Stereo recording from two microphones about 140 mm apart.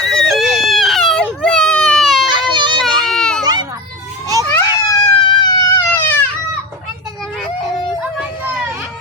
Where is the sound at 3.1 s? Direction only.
5° left (ahead or behind).